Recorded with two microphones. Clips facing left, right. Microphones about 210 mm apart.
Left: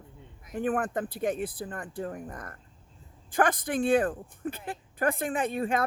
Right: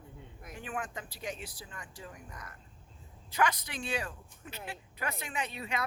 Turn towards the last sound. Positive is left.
turn(degrees=50)  # may be behind; listen again after turning